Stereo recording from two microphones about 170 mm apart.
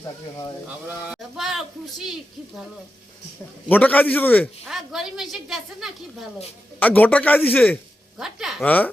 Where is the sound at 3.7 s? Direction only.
10° left (ahead or behind).